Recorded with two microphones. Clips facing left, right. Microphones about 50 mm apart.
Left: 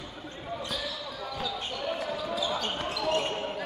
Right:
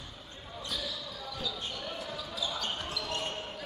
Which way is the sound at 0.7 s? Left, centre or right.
Left.